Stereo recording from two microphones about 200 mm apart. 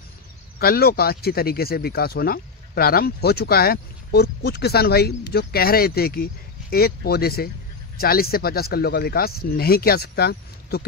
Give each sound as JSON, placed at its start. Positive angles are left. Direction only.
{"t": 0.6, "sound": "speech", "side_deg": 50}